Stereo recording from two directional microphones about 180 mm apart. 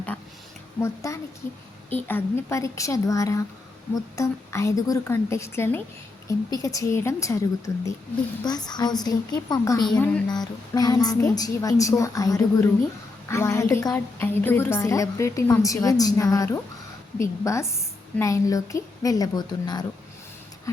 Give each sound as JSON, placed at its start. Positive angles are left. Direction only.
{"t": 0.8, "sound": "a woman's voice", "side_deg": 15}